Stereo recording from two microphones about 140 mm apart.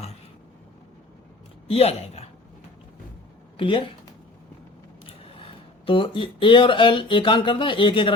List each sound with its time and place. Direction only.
1.6 s speech: 45° left (ahead or behind)
3.6 s speech: 40° left (ahead or behind)
5.0 s speech: 40° left (ahead or behind)